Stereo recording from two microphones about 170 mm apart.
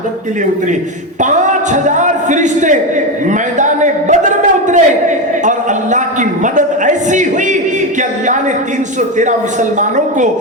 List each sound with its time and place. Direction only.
1.2 s a man's voice: 45° right (ahead or behind)
3.2 s a sound: 45° right (ahead or behind)
9.0 s a man's voice: 45° right (ahead or behind)